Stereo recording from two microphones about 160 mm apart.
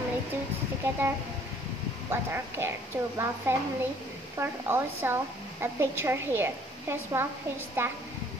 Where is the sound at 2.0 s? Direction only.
15° right (ahead or behind).